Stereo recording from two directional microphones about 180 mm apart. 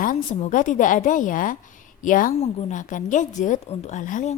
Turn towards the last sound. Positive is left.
turn(degrees=45)  # may be behind; listen again after turning